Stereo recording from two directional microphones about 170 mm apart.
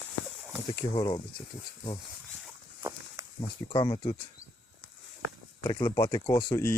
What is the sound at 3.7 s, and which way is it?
Speech, 25° left (ahead or behind).